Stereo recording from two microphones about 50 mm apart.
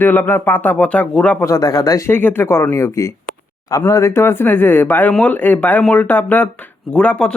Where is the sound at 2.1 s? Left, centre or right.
Left.